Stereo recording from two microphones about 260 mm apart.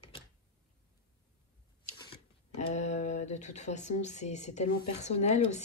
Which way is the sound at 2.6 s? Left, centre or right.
Left.